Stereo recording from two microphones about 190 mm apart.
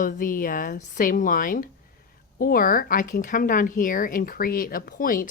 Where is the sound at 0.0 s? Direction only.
45° left (ahead or behind).